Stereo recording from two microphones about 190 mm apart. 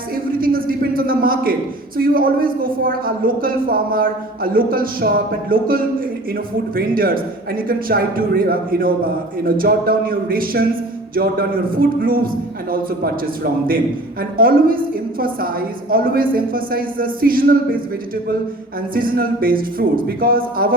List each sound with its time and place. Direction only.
0.3 s a man's voice: 50° right (ahead or behind)
14.2 s a woman's voice: 50° right (ahead or behind)
15.9 s a woman's voice: 50° right (ahead or behind)
18.9 s a woman's voice: 50° right (ahead or behind)